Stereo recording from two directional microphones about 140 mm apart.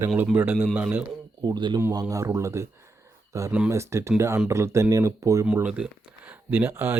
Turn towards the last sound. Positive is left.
turn(degrees=-15)  # may be behind; listen again after turning